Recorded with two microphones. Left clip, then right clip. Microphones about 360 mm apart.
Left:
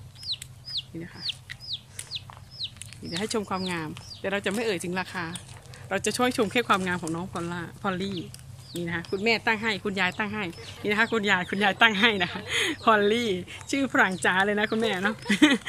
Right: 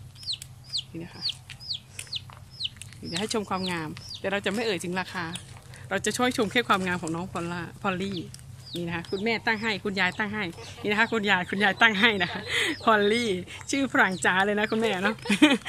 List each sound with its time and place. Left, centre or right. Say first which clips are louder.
0.3 s chicken: even; centre
1.7 s chicken: right 1 dB; centre
2.0 s chicken: even; right
3.0 s speech: even; centre